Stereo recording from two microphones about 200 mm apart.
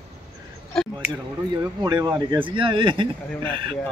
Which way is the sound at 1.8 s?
20° right (ahead or behind).